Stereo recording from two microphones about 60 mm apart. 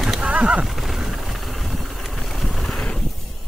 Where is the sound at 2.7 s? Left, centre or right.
Centre.